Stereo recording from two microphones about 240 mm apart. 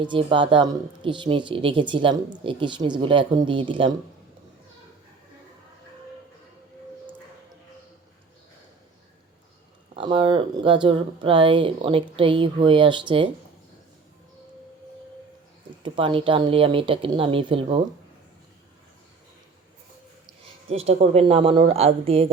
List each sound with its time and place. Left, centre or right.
0.0 s a woman's voice: right
9.9 s a woman's voice: right
15.8 s a woman's voice: centre
20.7 s a woman's voice: right